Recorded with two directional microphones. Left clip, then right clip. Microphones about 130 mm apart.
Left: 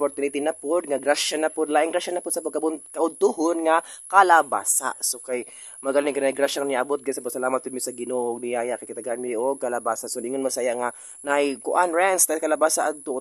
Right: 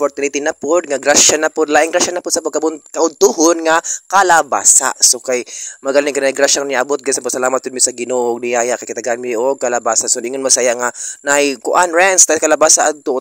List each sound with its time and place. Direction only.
0.0 s speech: 35° right (ahead or behind)